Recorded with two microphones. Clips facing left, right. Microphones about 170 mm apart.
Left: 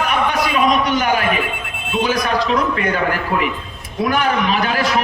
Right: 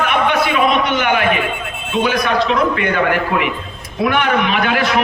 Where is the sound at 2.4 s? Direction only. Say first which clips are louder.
Right 2 dB; 35° left (ahead or behind).